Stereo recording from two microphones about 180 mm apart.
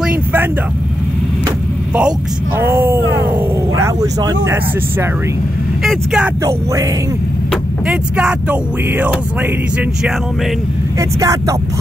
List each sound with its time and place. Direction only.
0.0 s vehicle: 10° right (ahead or behind)
2.6 s a sound: 10° right (ahead or behind)
5.9 s speech: 5° right (ahead or behind)
6.4 s speech: 20° right (ahead or behind)
7.8 s speech: 5° right (ahead or behind)
11.0 s speech: 20° right (ahead or behind)